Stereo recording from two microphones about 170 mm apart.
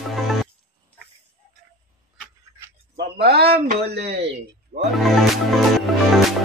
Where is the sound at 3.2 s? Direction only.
70° right (ahead or behind).